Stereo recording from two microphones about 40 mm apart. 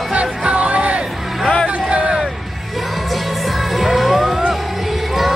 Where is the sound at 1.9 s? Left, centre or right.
Right.